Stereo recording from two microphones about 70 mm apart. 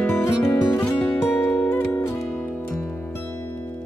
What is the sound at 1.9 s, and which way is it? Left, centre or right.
Music, left.